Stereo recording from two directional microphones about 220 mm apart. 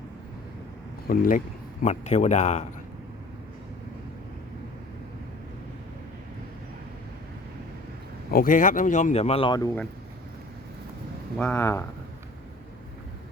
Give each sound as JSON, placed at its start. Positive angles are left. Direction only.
{"t": 1.0, "sound": "speech", "side_deg": 40}
{"t": 8.3, "sound": "speech", "side_deg": 40}
{"t": 11.3, "sound": "speech", "side_deg": 10}